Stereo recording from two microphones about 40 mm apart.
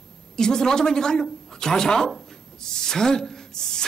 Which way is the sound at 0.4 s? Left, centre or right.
Centre.